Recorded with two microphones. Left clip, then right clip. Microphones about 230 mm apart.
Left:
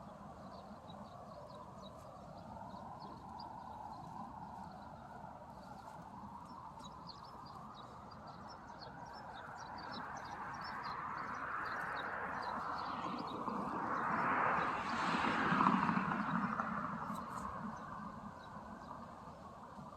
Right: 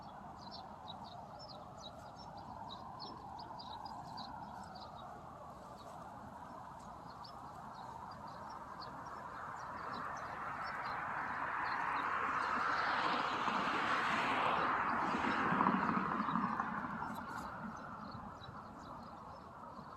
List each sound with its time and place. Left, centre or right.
9.7 s vehicle: right
14.8 s vehicle: left